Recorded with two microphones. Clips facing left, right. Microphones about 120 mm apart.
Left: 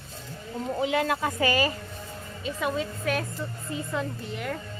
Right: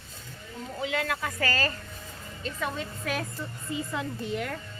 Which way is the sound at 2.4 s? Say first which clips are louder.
Left 4 dB; 5° left (ahead or behind).